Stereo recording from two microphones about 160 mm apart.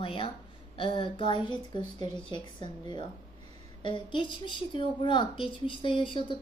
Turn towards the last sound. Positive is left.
turn(degrees=30)  # may be behind; listen again after turning